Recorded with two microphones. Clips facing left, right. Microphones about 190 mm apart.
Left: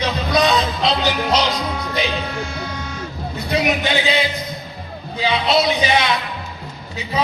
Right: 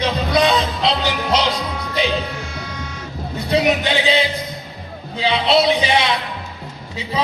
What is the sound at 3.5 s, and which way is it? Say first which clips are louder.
Music: right 2 dB; 30° right (ahead or behind).